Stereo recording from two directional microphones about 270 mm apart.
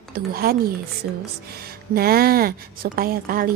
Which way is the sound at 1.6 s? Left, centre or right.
Right.